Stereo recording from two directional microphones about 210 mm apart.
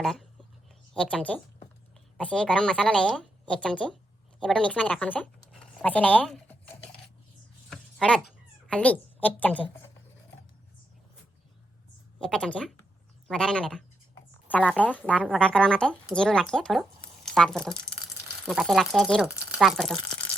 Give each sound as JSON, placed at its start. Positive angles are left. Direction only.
{"t": 0.0, "sound": "a woman's voice", "side_deg": 0}
{"t": 7.7, "sound": "a sound", "side_deg": 5}
{"t": 8.7, "sound": "a woman's voice", "side_deg": 5}
{"t": 12.2, "sound": "a woman's voice", "side_deg": 5}